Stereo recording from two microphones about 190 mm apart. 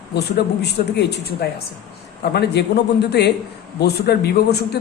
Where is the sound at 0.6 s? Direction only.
60° left (ahead or behind).